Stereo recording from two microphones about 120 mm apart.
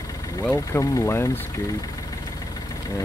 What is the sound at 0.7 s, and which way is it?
Speech, 25° left (ahead or behind).